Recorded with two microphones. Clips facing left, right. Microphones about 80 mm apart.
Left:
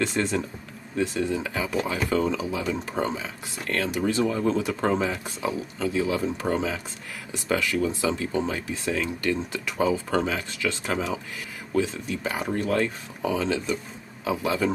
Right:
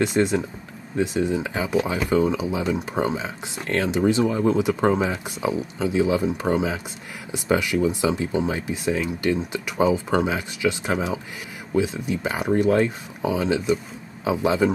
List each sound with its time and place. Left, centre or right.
0.0 s speech: centre